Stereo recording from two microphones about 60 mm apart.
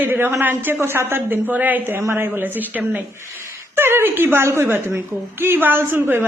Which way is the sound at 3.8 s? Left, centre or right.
Right.